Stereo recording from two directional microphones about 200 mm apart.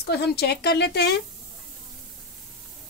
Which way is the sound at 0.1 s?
55° left (ahead or behind).